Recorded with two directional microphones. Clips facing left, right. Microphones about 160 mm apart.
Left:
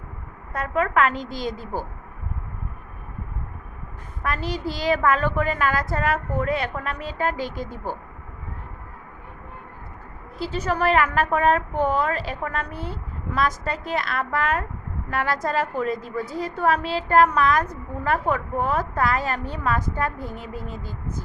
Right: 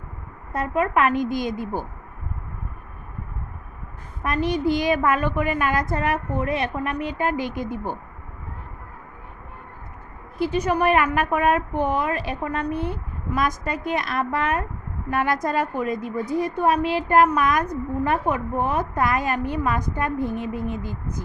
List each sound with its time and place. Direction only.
0.5 s a woman's voice: 20° right (ahead or behind)
4.2 s a woman's voice: 20° right (ahead or behind)
10.3 s a woman's voice: 15° right (ahead or behind)